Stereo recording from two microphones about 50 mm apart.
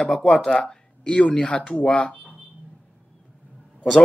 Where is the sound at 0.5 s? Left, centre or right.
Centre.